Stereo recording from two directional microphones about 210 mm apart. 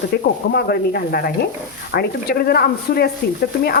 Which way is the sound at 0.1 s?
50° left (ahead or behind).